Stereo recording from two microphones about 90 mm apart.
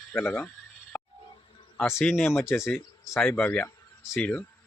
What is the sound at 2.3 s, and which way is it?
Speech, 30° left (ahead or behind).